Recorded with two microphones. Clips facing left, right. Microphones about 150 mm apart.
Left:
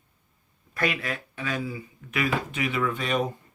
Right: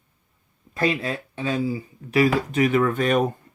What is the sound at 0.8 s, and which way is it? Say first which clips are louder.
Speech: right 5 dB; 30° right (ahead or behind).